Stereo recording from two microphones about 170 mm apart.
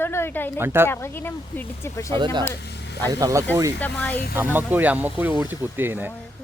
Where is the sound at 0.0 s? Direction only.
15° left (ahead or behind).